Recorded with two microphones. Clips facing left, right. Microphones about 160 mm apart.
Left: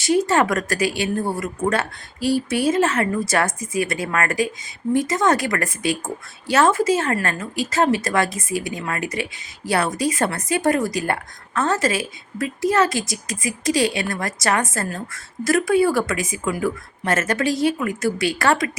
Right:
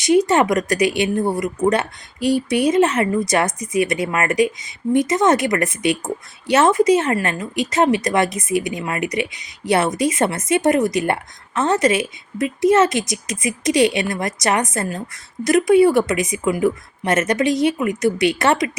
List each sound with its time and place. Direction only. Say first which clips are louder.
0.2 s a woman's voice: right 3 dB; 20° right (ahead or behind)